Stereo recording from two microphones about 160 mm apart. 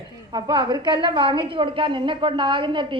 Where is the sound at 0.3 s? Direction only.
30° right (ahead or behind).